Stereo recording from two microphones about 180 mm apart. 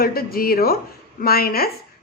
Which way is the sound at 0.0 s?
55° left (ahead or behind).